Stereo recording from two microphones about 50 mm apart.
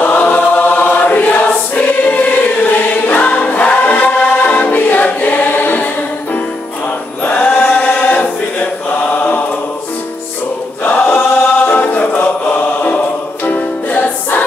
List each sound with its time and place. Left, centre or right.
0.0 s choir: left
7.2 s choir: left
10.8 s choir: left
13.4 s music: left